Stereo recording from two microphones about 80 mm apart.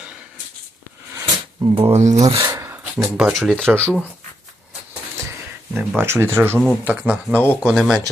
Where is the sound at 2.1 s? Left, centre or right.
Right.